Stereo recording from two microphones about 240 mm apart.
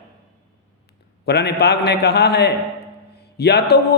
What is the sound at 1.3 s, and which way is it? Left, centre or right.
A man's voice, left.